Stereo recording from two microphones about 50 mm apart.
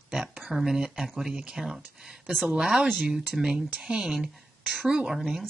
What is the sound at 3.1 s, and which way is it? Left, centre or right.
Speech, centre.